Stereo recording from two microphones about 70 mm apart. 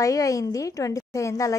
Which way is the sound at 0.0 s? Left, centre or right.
Left.